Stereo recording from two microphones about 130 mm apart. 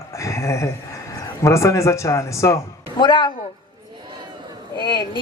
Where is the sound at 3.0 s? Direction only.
40° left (ahead or behind).